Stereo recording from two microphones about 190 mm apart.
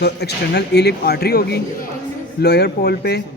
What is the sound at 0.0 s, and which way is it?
A man's voice, 60° left (ahead or behind).